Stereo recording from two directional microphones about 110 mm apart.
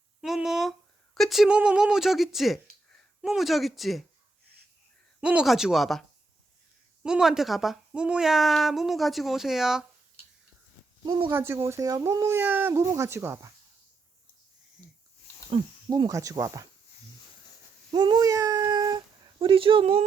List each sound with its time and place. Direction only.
0.2 s speech: 5° right (ahead or behind)
5.2 s speech: 10° right (ahead or behind)
11.0 s speech: 45° right (ahead or behind)
11.3 s speech: 20° right (ahead or behind)
15.9 s speech: 35° right (ahead or behind)
17.9 s speech: 40° right (ahead or behind); by 20.1 s 60° right (ahead or behind)